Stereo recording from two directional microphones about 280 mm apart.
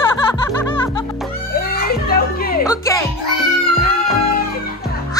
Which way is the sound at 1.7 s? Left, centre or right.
Left.